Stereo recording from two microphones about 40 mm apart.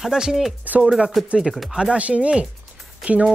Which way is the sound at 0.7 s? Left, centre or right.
Right.